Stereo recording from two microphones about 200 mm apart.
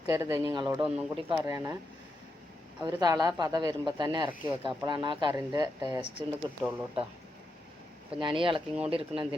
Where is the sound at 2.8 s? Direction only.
20° right (ahead or behind).